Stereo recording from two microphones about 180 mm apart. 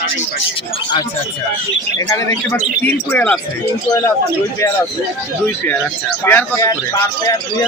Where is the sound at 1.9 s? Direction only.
15° left (ahead or behind).